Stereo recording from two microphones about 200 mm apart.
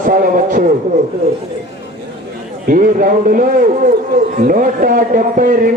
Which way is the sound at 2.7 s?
45° right (ahead or behind).